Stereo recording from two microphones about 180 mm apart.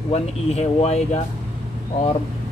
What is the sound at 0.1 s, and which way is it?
Speech, 35° left (ahead or behind).